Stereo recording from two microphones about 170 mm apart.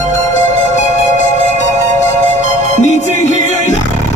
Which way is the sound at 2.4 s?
45° left (ahead or behind).